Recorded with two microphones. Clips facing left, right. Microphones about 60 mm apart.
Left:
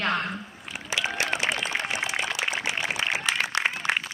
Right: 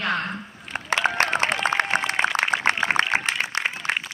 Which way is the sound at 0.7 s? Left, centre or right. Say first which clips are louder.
Right 7 dB; right.